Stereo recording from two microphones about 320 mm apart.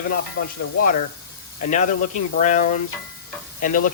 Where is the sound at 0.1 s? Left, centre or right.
Left.